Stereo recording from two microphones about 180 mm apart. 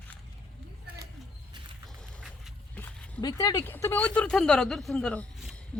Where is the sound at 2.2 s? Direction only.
5° left (ahead or behind).